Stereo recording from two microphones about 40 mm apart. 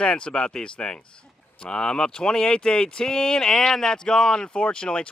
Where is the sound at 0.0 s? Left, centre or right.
Left.